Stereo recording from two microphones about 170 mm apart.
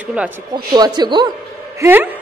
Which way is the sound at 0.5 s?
25° right (ahead or behind).